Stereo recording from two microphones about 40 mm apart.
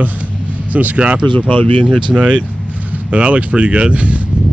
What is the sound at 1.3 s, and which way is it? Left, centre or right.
Speech, left.